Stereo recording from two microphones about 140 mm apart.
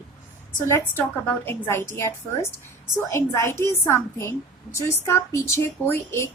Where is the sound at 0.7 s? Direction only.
15° left (ahead or behind).